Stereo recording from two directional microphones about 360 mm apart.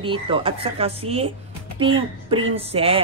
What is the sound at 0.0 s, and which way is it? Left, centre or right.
A woman's voice, centre.